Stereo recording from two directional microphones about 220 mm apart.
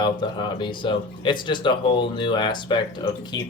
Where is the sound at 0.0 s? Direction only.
20° left (ahead or behind).